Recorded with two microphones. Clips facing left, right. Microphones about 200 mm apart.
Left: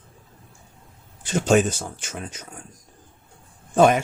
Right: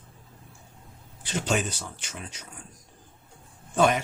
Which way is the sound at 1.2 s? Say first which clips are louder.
Left 9 dB; 50° left (ahead or behind).